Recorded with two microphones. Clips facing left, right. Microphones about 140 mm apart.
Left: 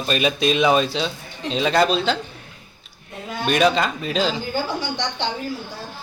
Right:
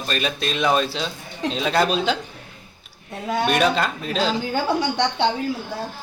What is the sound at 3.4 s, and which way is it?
Speech, centre (ahead or behind).